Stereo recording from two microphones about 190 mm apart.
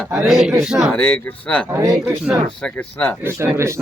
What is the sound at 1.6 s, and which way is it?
Speech, 15° right (ahead or behind).